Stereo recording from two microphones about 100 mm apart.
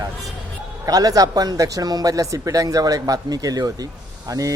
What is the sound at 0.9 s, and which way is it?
Speech, 40° right (ahead or behind).